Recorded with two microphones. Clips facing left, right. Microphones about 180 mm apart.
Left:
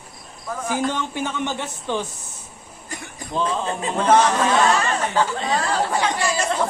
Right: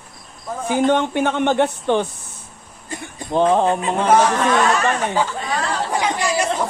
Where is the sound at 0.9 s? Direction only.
60° right (ahead or behind).